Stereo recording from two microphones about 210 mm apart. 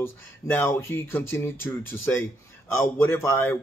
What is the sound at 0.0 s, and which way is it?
Speech, 10° left (ahead or behind).